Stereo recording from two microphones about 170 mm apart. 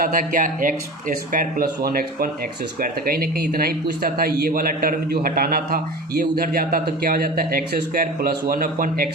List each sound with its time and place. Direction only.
0.0 s a man's voice: 55° right (ahead or behind)